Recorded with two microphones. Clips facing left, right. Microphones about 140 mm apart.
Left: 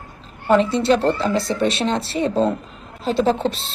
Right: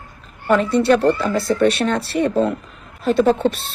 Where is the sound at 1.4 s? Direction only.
55° right (ahead or behind).